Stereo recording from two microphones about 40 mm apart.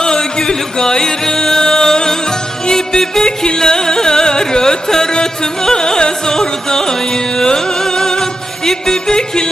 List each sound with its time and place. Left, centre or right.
0.0 s music: centre